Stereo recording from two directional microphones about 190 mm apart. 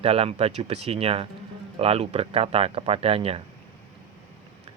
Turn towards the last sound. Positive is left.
turn(degrees=-30)  # may be behind; listen again after turning